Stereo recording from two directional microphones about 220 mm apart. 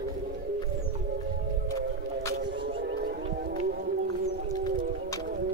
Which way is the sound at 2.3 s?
50° right (ahead or behind).